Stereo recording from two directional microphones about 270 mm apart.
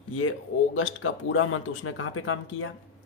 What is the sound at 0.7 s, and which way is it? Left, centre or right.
Speech, left.